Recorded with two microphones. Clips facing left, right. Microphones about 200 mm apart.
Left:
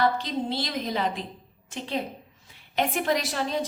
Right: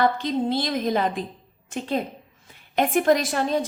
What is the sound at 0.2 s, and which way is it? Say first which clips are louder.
A woman's voice: right 5 dB; 50° right (ahead or behind).